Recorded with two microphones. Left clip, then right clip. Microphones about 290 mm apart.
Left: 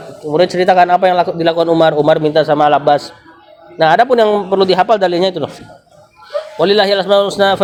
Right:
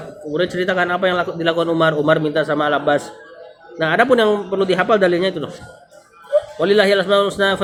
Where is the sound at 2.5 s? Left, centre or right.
Left.